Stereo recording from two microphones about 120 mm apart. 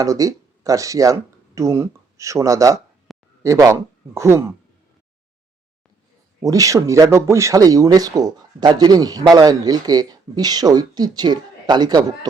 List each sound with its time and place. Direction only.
0.0 s speech: 30° right (ahead or behind)
3.1 s a sound: centre (ahead or behind)
3.4 s speech: 25° right (ahead or behind)
6.4 s speech: 30° right (ahead or behind)